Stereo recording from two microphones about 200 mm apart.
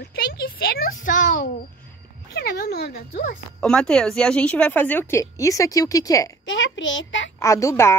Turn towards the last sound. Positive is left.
turn(degrees=15)  # may be behind; listen again after turning